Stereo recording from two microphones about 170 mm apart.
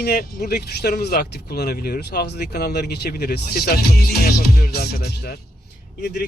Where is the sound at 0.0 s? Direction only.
65° left (ahead or behind).